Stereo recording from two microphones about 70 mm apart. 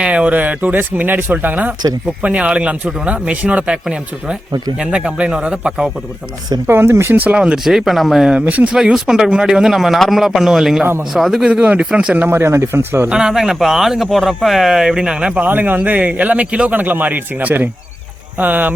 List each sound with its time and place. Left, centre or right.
0.0 s speech: centre
6.7 s speech: right
7.1 s speech: right
7.3 s speech: centre
7.6 s speech: centre
8.3 s speech: centre
8.7 s speech: centre
11.4 s speech: centre
12.1 s speech: right
13.1 s speech: centre
15.4 s speech: right